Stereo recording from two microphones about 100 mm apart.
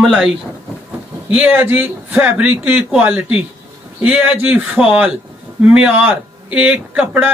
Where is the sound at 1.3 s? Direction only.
15° right (ahead or behind).